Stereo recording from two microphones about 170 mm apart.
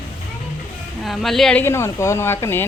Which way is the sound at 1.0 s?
Centre (ahead or behind).